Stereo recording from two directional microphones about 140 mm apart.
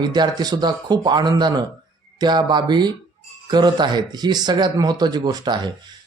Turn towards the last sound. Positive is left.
turn(degrees=-30)  # may be behind; listen again after turning